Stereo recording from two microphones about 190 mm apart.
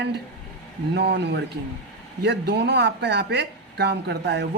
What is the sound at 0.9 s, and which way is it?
A woman's voice, 65° right (ahead or behind).